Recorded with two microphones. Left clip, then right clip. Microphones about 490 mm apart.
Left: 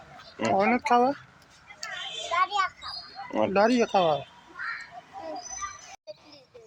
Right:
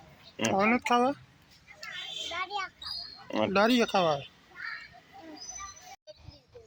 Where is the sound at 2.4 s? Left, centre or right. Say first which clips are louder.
Left 11 dB; right.